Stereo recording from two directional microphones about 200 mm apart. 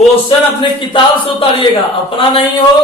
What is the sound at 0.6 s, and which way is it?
Speech, 25° left (ahead or behind).